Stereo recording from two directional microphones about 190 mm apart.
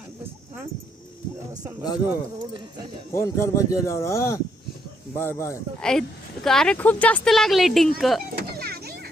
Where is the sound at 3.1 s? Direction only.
15° left (ahead or behind).